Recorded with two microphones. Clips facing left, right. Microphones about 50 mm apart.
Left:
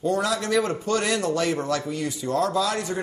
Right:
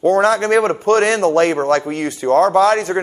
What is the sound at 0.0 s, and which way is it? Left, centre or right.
A man's voice, right.